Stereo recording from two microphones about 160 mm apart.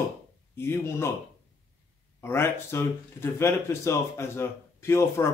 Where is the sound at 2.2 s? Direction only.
15° left (ahead or behind).